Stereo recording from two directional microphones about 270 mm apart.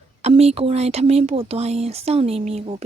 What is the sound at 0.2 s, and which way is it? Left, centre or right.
Speech, right.